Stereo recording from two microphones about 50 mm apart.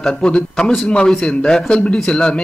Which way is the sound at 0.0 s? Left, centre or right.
Centre.